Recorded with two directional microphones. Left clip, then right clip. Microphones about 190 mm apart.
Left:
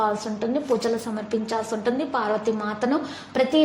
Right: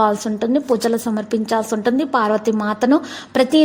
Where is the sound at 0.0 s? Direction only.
45° right (ahead or behind).